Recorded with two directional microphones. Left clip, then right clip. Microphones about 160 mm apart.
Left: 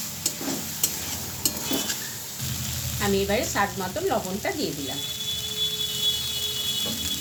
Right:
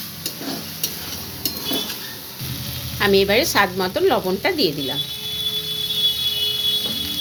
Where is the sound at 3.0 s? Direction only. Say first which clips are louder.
Right 9 dB; 65° right (ahead or behind).